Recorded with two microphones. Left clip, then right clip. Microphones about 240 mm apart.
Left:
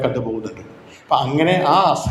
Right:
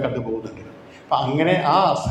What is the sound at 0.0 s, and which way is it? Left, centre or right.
A man's voice, left.